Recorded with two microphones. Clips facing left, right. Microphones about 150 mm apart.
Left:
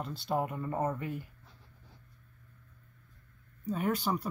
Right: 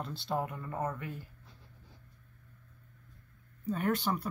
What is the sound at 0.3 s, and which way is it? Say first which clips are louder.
Speech: left 3 dB; 20° left (ahead or behind).